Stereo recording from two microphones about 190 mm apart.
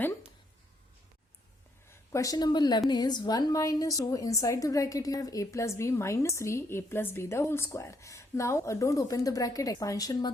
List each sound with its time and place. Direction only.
1.9 s a woman's voice: 15° left (ahead or behind)